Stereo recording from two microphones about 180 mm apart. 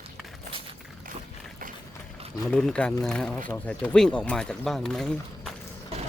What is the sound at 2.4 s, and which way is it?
Speech, 5° left (ahead or behind).